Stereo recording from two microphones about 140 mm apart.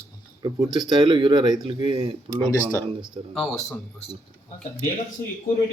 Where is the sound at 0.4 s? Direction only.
30° right (ahead or behind).